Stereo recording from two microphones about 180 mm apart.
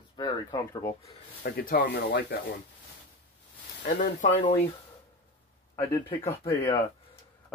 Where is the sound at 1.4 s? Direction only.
55° left (ahead or behind); by 2.3 s 70° left (ahead or behind).